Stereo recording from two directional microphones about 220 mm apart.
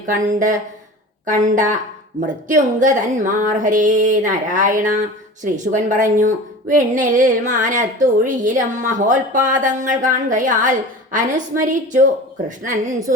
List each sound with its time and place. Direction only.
0.1 s a woman's voice: 35° right (ahead or behind)